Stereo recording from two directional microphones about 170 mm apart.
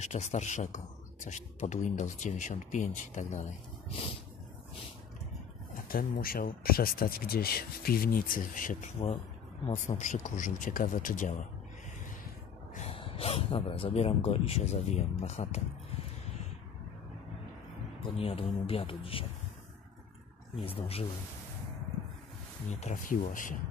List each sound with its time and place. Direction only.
0.0 s speech: 40° left (ahead or behind)
5.9 s speech: 60° left (ahead or behind)
12.7 s speech: 35° left (ahead or behind)
18.1 s speech: 35° left (ahead or behind)
20.6 s speech: 35° left (ahead or behind)
22.7 s speech: 45° left (ahead or behind)